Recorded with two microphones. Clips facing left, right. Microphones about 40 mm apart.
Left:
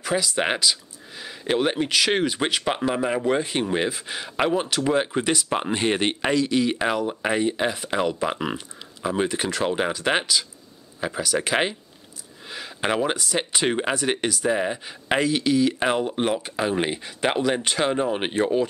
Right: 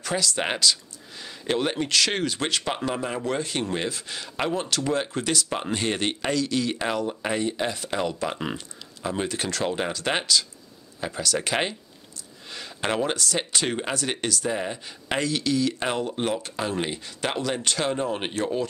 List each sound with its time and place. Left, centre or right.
0.0 s speech: centre